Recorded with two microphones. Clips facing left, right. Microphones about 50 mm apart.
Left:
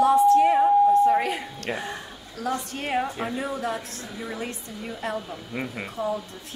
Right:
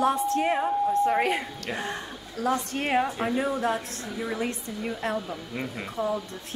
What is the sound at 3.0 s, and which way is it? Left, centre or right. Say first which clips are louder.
Speech: right 2 dB; centre.